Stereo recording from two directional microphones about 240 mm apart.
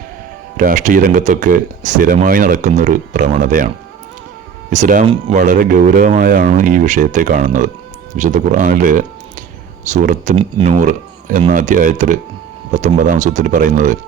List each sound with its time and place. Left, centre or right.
0.5 s speech: right
4.7 s speech: right
5.0 s speech: right
5.4 s speech: right